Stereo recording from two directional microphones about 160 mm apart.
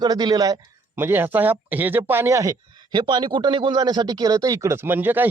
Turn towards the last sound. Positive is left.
turn(degrees=-10)  # may be behind; listen again after turning